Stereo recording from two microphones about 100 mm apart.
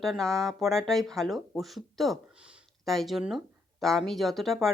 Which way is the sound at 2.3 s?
10° right (ahead or behind).